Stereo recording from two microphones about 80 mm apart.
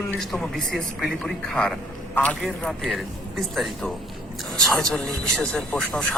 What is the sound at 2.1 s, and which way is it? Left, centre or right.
Speech, centre.